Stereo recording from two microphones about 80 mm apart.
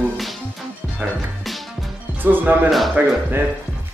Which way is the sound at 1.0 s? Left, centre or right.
Right.